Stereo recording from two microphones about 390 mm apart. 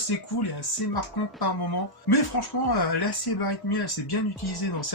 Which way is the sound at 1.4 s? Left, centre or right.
Left.